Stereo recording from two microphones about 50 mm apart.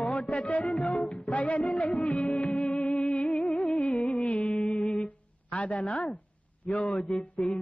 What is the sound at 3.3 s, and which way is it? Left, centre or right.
Music, centre.